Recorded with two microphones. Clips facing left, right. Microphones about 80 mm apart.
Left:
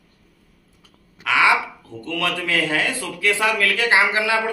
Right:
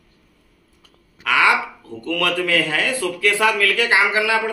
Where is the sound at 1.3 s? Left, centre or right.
Left.